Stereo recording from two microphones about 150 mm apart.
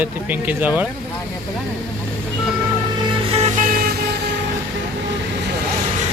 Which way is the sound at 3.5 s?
70° right (ahead or behind).